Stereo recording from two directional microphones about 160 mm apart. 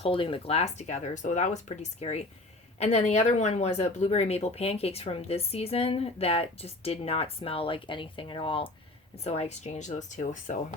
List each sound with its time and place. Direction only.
0.0 s speech: 35° left (ahead or behind); by 10.6 s 50° left (ahead or behind)